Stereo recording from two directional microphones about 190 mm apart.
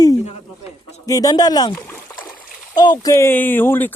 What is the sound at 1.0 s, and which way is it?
Speech, 20° left (ahead or behind).